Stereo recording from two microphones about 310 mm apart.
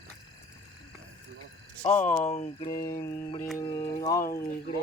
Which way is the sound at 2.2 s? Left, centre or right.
Left.